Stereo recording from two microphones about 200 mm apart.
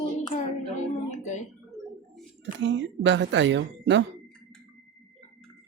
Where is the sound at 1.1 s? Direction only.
35° left (ahead or behind).